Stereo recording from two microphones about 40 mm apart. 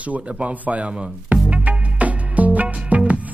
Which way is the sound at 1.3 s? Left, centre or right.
Right.